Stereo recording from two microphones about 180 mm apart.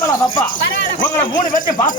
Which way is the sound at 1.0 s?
50° left (ahead or behind).